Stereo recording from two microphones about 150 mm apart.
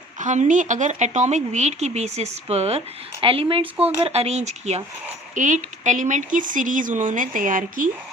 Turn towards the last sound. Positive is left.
turn(degrees=-65)  # may be behind; listen again after turning